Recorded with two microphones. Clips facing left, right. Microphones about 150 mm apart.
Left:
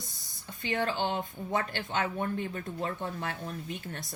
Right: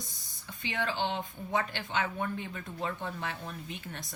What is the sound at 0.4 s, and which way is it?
Speech, 45° left (ahead or behind).